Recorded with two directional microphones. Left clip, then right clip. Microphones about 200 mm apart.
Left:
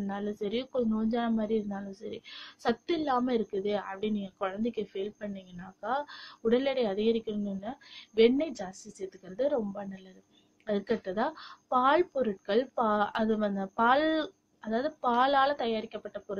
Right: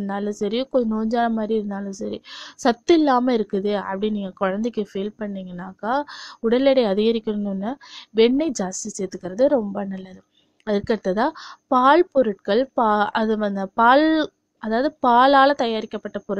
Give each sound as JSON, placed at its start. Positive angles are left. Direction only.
{"t": 0.0, "sound": "a woman's voice", "side_deg": -45}